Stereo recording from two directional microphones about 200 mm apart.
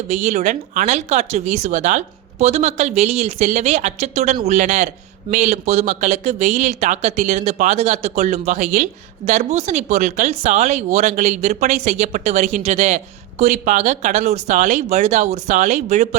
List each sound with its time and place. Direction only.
0.1 s speech: 35° right (ahead or behind)